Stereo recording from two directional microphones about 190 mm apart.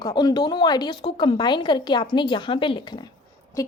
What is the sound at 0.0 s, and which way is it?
A woman's voice, 20° left (ahead or behind).